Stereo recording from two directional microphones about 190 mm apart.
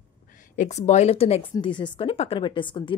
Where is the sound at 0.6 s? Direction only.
35° left (ahead or behind).